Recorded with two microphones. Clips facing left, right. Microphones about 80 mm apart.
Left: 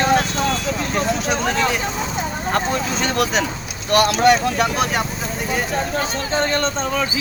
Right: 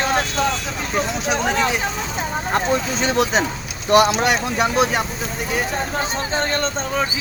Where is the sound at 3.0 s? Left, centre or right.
Right.